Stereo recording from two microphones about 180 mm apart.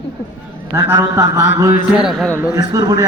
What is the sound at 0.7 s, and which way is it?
A man's voice, 15° right (ahead or behind).